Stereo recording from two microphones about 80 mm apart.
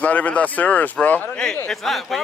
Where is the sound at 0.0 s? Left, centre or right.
Centre.